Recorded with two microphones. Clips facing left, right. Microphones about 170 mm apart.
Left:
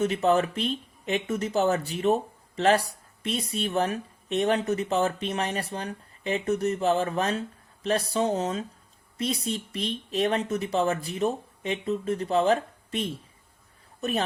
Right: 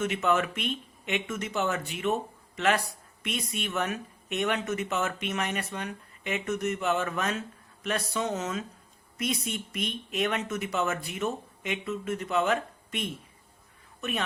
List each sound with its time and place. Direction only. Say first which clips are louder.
0.0 s speech: left 4 dB; 35° left (ahead or behind)